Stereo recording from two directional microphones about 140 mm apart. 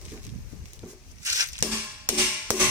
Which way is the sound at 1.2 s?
25° right (ahead or behind).